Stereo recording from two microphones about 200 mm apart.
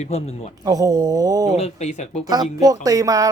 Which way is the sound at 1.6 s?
35° left (ahead or behind).